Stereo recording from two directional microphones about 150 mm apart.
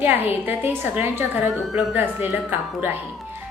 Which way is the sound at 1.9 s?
10° right (ahead or behind).